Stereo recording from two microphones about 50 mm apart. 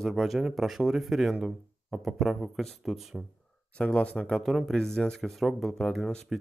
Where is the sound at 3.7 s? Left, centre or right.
Left.